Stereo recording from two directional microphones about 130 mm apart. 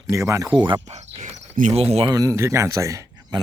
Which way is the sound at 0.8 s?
60° right (ahead or behind).